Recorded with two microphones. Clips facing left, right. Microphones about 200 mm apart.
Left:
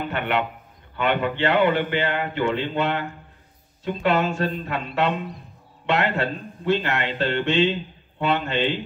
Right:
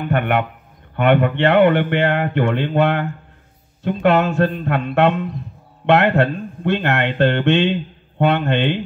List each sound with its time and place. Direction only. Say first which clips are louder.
0.1 s speech: right 9 dB; 55° right (ahead or behind)